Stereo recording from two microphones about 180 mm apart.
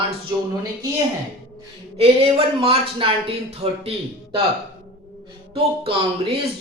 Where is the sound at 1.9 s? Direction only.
35° right (ahead or behind).